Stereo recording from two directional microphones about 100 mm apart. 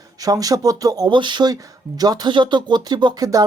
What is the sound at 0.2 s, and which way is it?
Speech, 40° right (ahead or behind).